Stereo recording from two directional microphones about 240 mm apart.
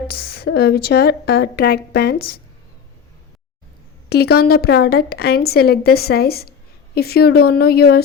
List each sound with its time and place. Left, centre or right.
0.1 s a woman's voice: left
4.1 s a woman's voice: left